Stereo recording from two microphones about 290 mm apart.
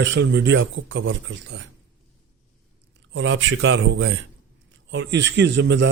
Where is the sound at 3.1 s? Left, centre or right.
Right.